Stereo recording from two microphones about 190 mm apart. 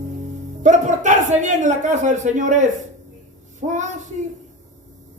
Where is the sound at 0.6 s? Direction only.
40° right (ahead or behind).